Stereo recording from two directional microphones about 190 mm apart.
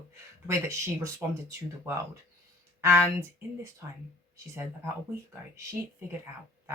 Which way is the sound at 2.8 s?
15° right (ahead or behind).